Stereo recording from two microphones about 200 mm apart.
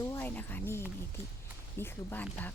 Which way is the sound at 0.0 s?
10° left (ahead or behind).